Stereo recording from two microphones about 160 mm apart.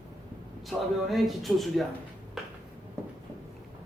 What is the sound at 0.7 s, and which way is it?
Speech, centre (ahead or behind).